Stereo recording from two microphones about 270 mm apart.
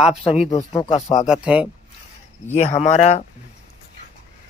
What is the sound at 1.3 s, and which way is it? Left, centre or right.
Speech, centre.